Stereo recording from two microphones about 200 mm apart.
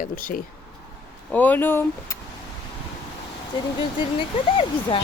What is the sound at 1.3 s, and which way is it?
Speech, 10° left (ahead or behind).